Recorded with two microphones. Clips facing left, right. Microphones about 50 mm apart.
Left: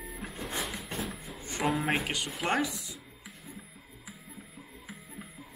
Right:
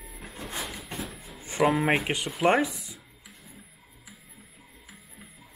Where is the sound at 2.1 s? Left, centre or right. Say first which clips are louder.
Right 7 dB; right.